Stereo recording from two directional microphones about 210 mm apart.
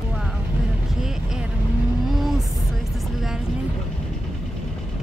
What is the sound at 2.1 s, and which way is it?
Vehicle, centre (ahead or behind).